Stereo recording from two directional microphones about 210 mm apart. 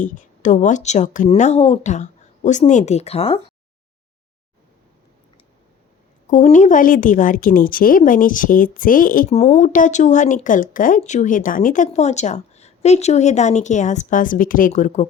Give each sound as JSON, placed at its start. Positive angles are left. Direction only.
{"t": 0.0, "sound": "a woman's voice", "side_deg": 35}
{"t": 6.3, "sound": "a woman's voice", "side_deg": 35}